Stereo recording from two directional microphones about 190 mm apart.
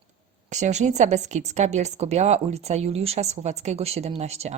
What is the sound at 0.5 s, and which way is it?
Speech, 40° right (ahead or behind).